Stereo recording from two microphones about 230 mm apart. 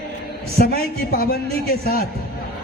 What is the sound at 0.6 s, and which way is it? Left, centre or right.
A man's voice, left.